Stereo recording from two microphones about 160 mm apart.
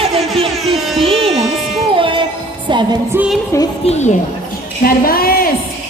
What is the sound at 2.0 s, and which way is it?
Music, 30° right (ahead or behind).